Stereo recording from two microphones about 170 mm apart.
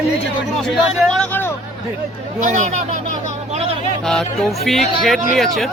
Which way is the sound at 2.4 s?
45° right (ahead or behind).